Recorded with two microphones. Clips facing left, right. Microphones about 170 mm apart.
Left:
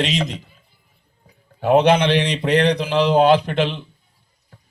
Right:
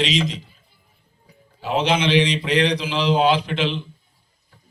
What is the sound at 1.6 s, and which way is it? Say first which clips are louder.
Speech: left 7 dB; 60° left (ahead or behind).